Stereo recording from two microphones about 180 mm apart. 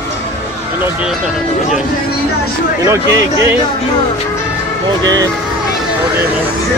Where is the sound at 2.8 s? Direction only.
15° right (ahead or behind).